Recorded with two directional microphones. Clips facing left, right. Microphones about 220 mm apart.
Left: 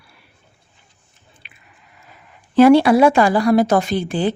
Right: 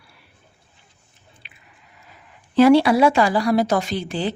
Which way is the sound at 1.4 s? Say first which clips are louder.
Left 1 dB; 50° left (ahead or behind).